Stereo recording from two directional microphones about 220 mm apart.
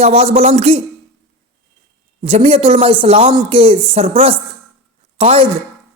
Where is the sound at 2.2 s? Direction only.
25° right (ahead or behind).